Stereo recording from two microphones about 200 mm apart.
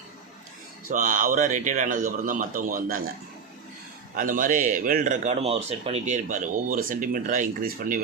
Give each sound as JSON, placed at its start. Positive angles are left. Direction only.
{"t": 0.9, "sound": "a man's voice", "side_deg": -40}
{"t": 4.1, "sound": "a man's voice", "side_deg": -45}